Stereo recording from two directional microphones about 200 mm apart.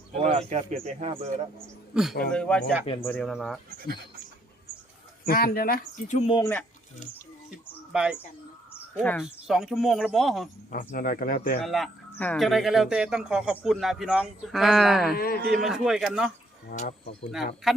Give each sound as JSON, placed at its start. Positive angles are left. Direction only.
{"t": 0.2, "sound": "speech", "side_deg": -30}
{"t": 1.9, "sound": "a man's voice", "side_deg": 0}
{"t": 5.2, "sound": "speech", "side_deg": 50}
{"t": 6.1, "sound": "speech", "side_deg": 25}
{"t": 6.4, "sound": "speech", "side_deg": 10}
{"t": 7.9, "sound": "speech", "side_deg": -5}
{"t": 9.2, "sound": "speech", "side_deg": 0}
{"t": 10.7, "sound": "speech", "side_deg": 45}
{"t": 11.6, "sound": "speech", "side_deg": 0}
{"t": 15.1, "sound": "speech", "side_deg": 50}
{"t": 15.5, "sound": "speech", "side_deg": 0}
{"t": 16.7, "sound": "speech", "side_deg": 30}
{"t": 17.3, "sound": "speech", "side_deg": 0}